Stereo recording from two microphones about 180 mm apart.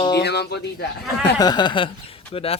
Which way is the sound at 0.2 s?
65° left (ahead or behind).